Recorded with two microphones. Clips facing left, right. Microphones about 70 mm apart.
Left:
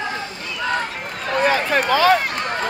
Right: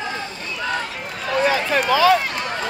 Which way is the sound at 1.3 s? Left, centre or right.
Left.